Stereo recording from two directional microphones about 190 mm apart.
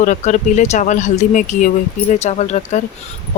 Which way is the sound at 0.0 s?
40° left (ahead or behind).